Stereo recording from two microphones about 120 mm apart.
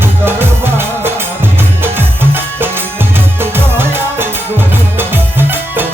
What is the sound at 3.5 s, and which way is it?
Music, 20° right (ahead or behind).